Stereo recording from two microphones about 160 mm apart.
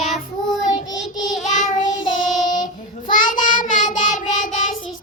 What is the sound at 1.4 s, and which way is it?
Child singing, 50° left (ahead or behind).